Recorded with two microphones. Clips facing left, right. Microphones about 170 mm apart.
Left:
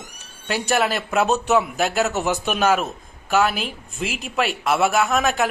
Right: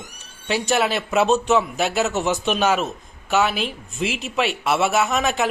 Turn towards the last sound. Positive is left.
turn(degrees=0)  # may be behind; listen again after turning